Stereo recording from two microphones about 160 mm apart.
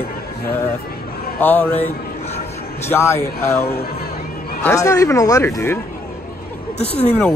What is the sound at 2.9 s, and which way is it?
Speech, 15° left (ahead or behind).